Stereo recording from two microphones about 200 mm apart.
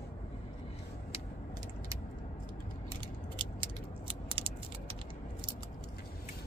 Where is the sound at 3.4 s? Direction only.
25° right (ahead or behind).